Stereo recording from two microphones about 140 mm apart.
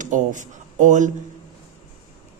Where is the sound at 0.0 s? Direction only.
65° right (ahead or behind).